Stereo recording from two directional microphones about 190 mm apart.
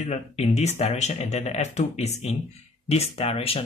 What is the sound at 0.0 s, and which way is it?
Speech, 35° left (ahead or behind).